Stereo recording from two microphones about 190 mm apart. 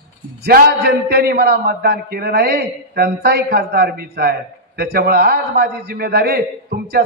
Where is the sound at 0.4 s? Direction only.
55° right (ahead or behind).